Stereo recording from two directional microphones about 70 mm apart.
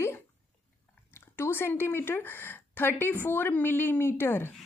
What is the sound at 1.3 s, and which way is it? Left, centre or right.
A woman's voice, left.